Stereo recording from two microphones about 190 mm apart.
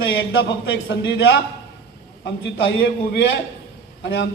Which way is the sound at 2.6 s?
70° left (ahead or behind).